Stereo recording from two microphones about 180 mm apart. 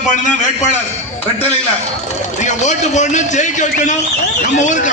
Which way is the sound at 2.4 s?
40° left (ahead or behind).